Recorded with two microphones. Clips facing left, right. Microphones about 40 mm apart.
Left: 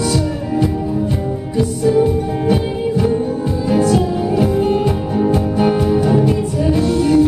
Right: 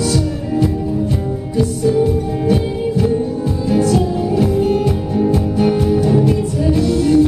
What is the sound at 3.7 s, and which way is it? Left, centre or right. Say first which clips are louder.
Music: even; centre.